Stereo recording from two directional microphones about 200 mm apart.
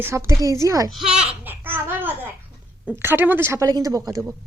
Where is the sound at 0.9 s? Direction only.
5° right (ahead or behind).